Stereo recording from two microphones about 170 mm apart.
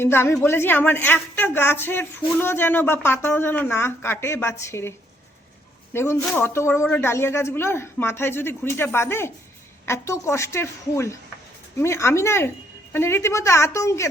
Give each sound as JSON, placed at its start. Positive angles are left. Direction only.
{"t": 0.0, "sound": "speech", "side_deg": 15}